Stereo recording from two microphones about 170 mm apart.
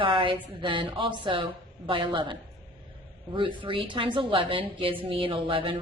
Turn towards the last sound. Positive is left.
turn(degrees=-30)  # may be behind; listen again after turning